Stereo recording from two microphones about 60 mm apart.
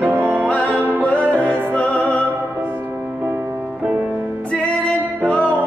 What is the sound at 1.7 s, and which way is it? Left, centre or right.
Music, left.